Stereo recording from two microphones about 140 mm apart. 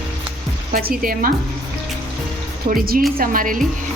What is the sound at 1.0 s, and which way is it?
Music, 90° right.